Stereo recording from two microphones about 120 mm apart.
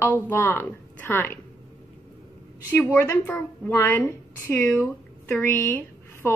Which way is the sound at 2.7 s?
15° left (ahead or behind).